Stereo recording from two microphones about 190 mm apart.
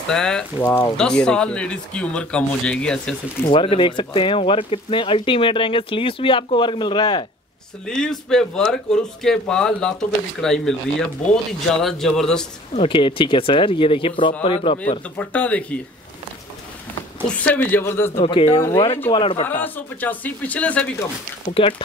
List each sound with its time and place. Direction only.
0.1 s speech: 5° left (ahead or behind)
3.5 s speech: 25° left (ahead or behind)
7.8 s speech: 5° left (ahead or behind)
12.7 s speech: 25° left (ahead or behind)
15.1 s speech: 5° left (ahead or behind)
17.3 s speech: 5° left (ahead or behind)
18.2 s speech: 30° left (ahead or behind)
19.6 s speech: 10° left (ahead or behind)
21.5 s speech: 30° left (ahead or behind)